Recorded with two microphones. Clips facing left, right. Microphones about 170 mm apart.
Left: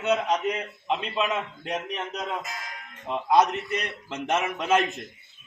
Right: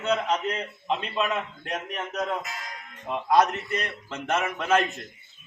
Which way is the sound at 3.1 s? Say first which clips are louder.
Even; 15° left (ahead or behind).